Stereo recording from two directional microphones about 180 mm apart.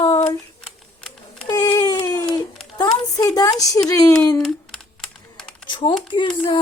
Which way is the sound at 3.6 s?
20° left (ahead or behind).